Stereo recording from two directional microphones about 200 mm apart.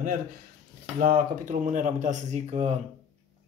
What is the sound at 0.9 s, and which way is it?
Speech, 45° right (ahead or behind).